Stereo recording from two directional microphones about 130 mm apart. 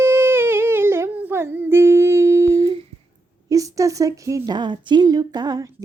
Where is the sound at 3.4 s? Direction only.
25° right (ahead or behind).